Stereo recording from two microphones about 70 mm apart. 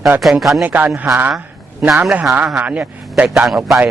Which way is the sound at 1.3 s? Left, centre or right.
Centre.